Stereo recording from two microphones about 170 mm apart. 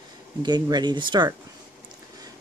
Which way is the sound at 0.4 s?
25° right (ahead or behind).